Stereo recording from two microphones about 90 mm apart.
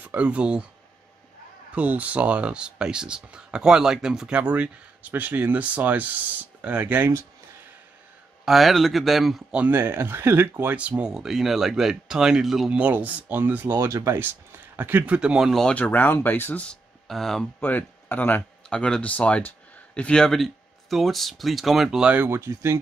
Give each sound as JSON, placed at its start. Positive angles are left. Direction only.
{"t": 0.0, "sound": "speech", "side_deg": -15}
{"t": 1.8, "sound": "speech", "side_deg": -15}
{"t": 8.5, "sound": "speech", "side_deg": 0}
{"t": 9.6, "sound": "speech", "side_deg": -25}
{"t": 13.8, "sound": "speech", "side_deg": -35}
{"t": 14.2, "sound": "speech", "side_deg": -20}
{"t": 15.6, "sound": "speech", "side_deg": 15}
{"t": 16.6, "sound": "speech", "side_deg": 5}
{"t": 17.6, "sound": "speech", "side_deg": 20}
{"t": 22.1, "sound": "speech", "side_deg": -25}